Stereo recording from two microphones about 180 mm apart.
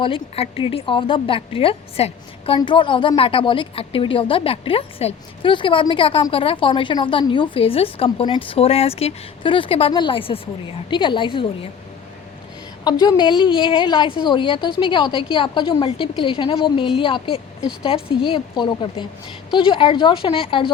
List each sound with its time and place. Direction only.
0.0 s a woman's voice: 30° left (ahead or behind)
12.8 s a woman's voice: 25° left (ahead or behind)